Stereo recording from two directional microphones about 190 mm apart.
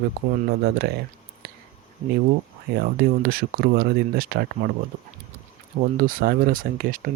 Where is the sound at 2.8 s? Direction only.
50° right (ahead or behind).